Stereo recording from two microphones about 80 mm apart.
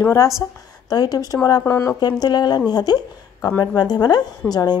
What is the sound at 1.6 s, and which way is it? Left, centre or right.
Speech, left.